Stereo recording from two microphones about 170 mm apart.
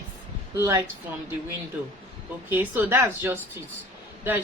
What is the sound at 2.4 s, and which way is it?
Speech, 10° right (ahead or behind).